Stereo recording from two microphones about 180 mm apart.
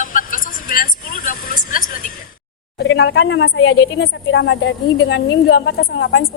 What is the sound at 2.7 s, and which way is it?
Speech, 70° left (ahead or behind).